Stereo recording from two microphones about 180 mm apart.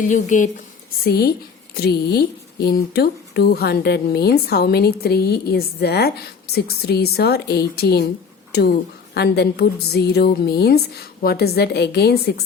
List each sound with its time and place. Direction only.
0.0 s speech: 45° left (ahead or behind)
1.0 s speech: 60° left (ahead or behind)
9.1 s speech: 65° left (ahead or behind)